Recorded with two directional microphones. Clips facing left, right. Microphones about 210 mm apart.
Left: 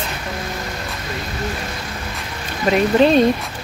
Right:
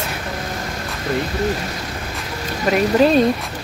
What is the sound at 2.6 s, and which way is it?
Speech, 5° right (ahead or behind).